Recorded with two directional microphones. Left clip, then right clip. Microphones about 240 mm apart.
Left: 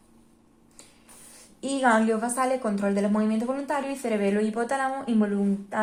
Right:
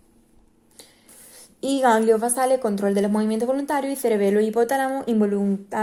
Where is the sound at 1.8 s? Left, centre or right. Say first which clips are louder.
Right 5 dB; right.